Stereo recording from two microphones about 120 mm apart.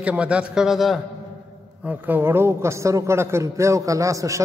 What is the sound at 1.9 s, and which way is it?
A man's voice, 15° right (ahead or behind).